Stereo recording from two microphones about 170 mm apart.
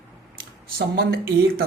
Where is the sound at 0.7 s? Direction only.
65° right (ahead or behind).